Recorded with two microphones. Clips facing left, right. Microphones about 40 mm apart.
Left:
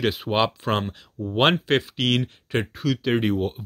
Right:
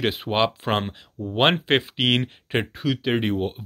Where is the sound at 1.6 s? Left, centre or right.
Right.